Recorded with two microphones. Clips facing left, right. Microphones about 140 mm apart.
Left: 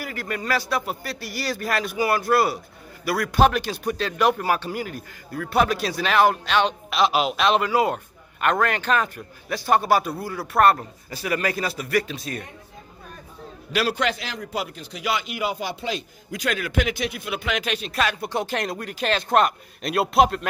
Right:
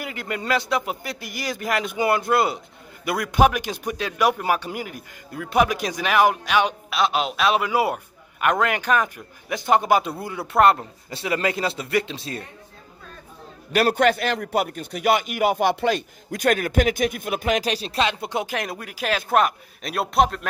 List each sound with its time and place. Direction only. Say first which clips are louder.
0.0 s a man's voice: even; 20° right (ahead or behind)
6.9 s a man's voice: left 2 dB; centre (ahead or behind); by 12.4 s 25° right (ahead or behind)
13.7 s a man's voice: right 5 dB; 50° right (ahead or behind); by 20.4 s centre (ahead or behind)